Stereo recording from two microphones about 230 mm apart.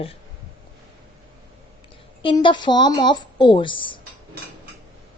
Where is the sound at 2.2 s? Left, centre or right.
Left.